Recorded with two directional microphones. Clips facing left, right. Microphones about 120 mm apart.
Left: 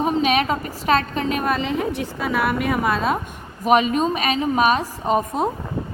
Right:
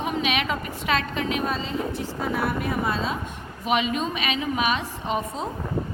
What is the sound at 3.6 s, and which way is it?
A woman's voice, 40° left (ahead or behind).